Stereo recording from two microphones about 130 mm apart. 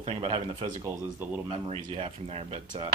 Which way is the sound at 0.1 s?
45° right (ahead or behind).